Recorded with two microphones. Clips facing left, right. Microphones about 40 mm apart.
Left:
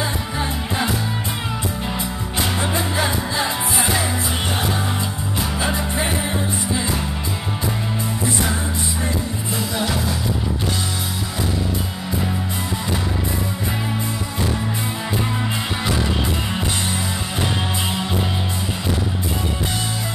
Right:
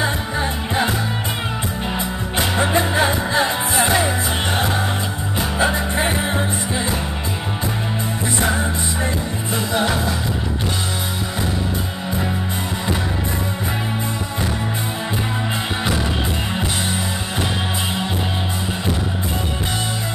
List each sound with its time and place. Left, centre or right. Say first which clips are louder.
2.3 s music: right 4 dB; right
6.0 s music: right 2 dB; right
9.8 s music: right 4 dB; right